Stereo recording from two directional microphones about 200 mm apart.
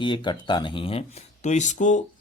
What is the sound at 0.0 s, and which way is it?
Speech, 25° left (ahead or behind).